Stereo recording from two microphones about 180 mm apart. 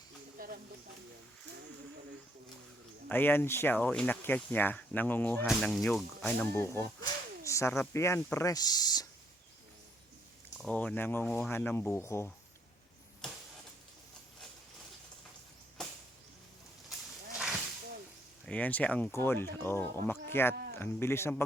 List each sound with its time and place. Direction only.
0.3 s a sound: 55° right (ahead or behind)
3.1 s speech: 10° left (ahead or behind)
10.6 s speech: 5° left (ahead or behind)
16.9 s wild animals: 5° right (ahead or behind)
18.4 s speech: 10° left (ahead or behind)